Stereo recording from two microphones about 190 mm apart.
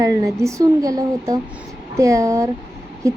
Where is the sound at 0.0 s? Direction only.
20° right (ahead or behind).